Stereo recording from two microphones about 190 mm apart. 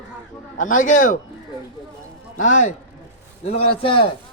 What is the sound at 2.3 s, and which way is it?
A man's voice, 40° left (ahead or behind).